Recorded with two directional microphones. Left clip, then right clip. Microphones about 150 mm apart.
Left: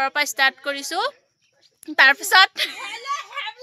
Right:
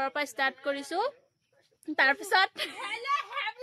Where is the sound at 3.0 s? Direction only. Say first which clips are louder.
Left 2 dB; 35° left (ahead or behind).